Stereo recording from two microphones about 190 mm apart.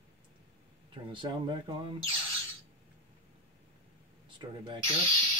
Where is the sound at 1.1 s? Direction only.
25° right (ahead or behind).